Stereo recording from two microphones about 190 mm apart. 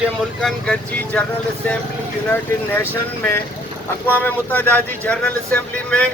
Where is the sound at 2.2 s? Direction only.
10° left (ahead or behind).